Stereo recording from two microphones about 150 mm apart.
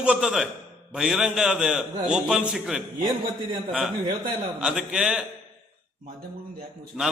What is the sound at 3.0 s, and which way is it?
Speech, 30° right (ahead or behind).